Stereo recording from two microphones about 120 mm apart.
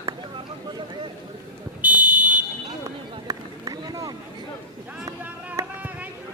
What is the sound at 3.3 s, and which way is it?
Run, 30° right (ahead or behind).